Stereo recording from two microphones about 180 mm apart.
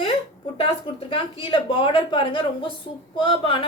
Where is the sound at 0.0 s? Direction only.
30° left (ahead or behind).